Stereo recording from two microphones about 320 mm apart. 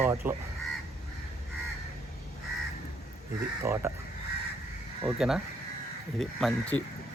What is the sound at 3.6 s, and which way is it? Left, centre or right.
Speech, centre.